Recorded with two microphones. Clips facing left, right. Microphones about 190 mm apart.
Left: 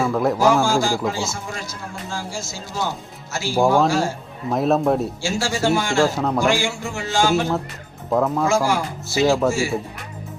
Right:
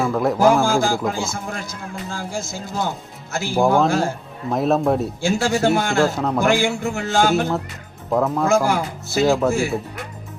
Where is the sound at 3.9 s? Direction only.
55° right (ahead or behind).